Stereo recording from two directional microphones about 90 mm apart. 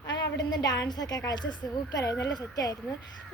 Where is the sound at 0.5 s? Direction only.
50° left (ahead or behind).